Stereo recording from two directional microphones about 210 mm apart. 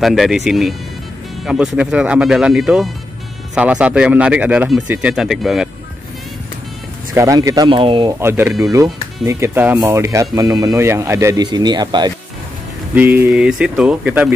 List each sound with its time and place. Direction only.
0.0 s speech: centre (ahead or behind)
7.2 s speech: 15° right (ahead or behind)
8.2 s a man's voice: 10° right (ahead or behind)
12.9 s speech: 10° right (ahead or behind)